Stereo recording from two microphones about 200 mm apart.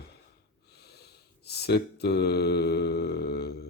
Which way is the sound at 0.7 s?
55° left (ahead or behind).